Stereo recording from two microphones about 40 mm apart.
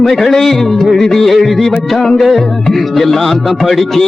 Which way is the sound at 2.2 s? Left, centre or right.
Centre.